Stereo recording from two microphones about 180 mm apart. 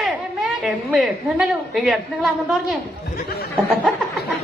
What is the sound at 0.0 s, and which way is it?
A woman's voice, centre (ahead or behind).